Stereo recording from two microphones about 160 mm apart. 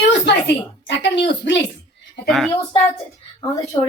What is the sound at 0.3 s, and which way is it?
A woman's voice, 90° left.